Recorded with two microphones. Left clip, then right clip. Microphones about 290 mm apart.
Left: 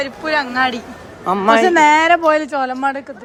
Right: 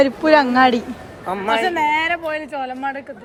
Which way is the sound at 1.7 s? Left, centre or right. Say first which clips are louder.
Left 8 dB; centre.